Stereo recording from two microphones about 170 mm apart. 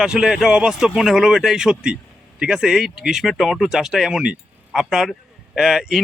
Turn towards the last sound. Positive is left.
turn(degrees=0)  # may be behind; listen again after turning